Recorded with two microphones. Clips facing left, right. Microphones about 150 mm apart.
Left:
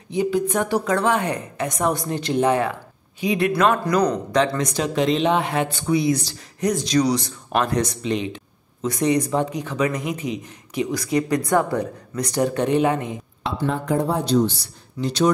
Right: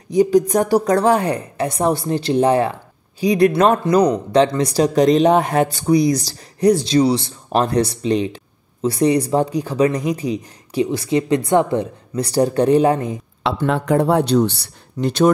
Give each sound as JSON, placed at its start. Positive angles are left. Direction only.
{"t": 0.1, "sound": "speech", "side_deg": -40}
{"t": 13.7, "sound": "speech", "side_deg": -70}